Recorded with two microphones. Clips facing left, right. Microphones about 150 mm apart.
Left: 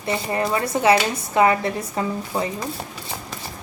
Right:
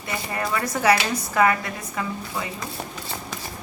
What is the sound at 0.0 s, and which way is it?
A woman's voice, 25° left (ahead or behind).